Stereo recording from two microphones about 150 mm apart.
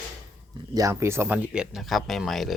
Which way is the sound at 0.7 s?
20° right (ahead or behind).